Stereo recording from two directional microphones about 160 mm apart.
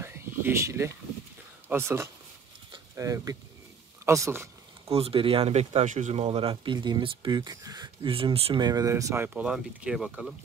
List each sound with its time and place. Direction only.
0.0 s a sound: 15° right (ahead or behind)
1.7 s speech: 15° right (ahead or behind)
2.7 s a sound: 20° right (ahead or behind)
4.9 s speech: 35° right (ahead or behind)
6.2 s speech: 35° right (ahead or behind)
8.5 s speech: 25° right (ahead or behind); by 10.3 s centre (ahead or behind)